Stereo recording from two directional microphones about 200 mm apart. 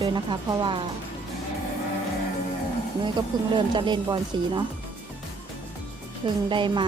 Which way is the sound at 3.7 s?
25° right (ahead or behind).